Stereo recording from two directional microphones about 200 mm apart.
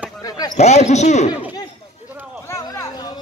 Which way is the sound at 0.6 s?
35° left (ahead or behind).